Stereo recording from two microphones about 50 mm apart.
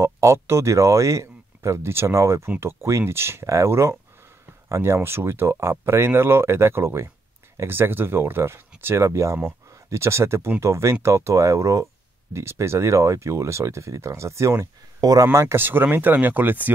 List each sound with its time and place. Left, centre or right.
0.0 s speech: right
15.5 s speech: right